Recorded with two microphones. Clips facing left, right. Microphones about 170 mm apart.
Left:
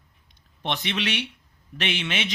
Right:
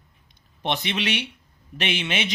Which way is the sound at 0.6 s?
5° right (ahead or behind).